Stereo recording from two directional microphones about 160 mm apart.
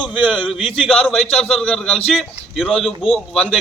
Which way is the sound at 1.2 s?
40° left (ahead or behind).